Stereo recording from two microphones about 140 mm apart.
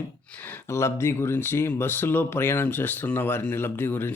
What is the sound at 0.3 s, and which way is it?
Speech, 15° left (ahead or behind).